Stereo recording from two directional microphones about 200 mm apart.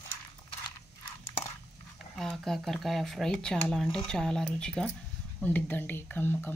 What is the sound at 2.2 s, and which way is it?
Speech, centre (ahead or behind).